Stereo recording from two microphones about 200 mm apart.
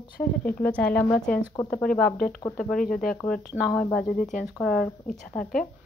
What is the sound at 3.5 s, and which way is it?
Speech, centre (ahead or behind).